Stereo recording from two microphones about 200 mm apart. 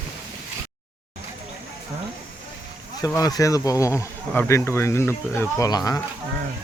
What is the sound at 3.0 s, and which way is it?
Speech, 20° left (ahead or behind).